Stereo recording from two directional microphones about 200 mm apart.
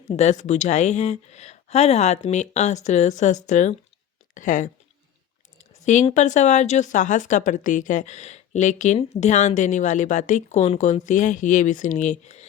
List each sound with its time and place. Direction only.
0.1 s speech: 35° left (ahead or behind)
5.8 s speech: 35° left (ahead or behind)